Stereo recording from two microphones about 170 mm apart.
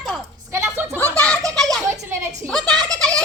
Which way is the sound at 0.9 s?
10° left (ahead or behind).